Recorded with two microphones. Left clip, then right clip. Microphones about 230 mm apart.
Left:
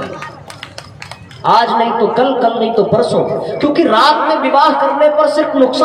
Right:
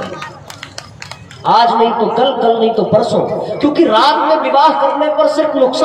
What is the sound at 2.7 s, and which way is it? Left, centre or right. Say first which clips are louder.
A man's voice: even; left.